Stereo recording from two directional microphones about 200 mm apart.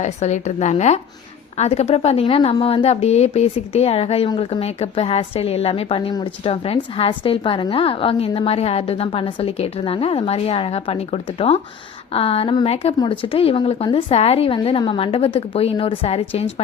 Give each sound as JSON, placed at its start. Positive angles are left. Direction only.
{"t": 0.0, "sound": "a woman's voice", "side_deg": 35}